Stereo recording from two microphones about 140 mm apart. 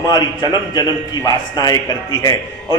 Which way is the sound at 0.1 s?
30° left (ahead or behind).